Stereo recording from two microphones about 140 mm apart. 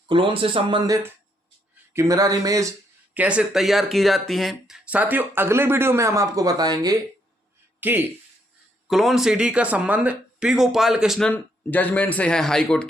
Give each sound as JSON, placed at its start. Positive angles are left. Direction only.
{"t": 0.1, "sound": "speech", "side_deg": -35}
{"t": 1.9, "sound": "speech", "side_deg": -20}
{"t": 3.2, "sound": "speech", "side_deg": -10}
{"t": 7.8, "sound": "speech", "side_deg": -15}
{"t": 8.9, "sound": "speech", "side_deg": 0}
{"t": 11.3, "sound": "speech", "side_deg": 10}